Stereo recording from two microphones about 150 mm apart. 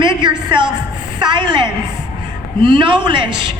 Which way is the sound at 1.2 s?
30° right (ahead or behind).